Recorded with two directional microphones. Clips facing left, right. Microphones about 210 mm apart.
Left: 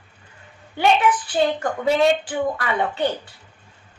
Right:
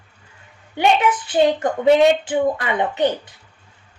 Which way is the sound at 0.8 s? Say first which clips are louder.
Right 1 dB; 20° right (ahead or behind).